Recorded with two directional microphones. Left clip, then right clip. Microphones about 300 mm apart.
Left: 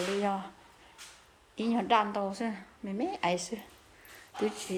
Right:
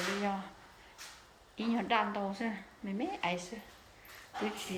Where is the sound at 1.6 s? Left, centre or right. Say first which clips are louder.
Left 5 dB; centre.